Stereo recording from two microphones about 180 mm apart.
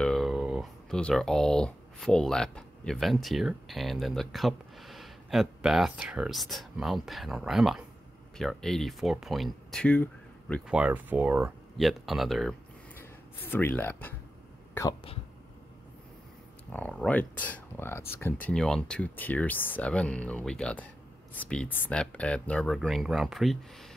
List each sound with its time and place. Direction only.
0.0 s speech: centre (ahead or behind)
10.7 s speech: 5° right (ahead or behind)
12.9 s speech: 10° left (ahead or behind)
14.7 s a sound: 15° left (ahead or behind)
16.7 s speech: 5° left (ahead or behind)